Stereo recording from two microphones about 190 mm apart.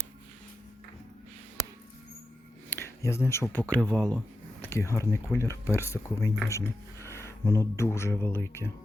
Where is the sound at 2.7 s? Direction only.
15° left (ahead or behind).